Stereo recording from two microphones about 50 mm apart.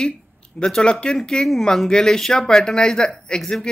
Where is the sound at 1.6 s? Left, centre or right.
Centre.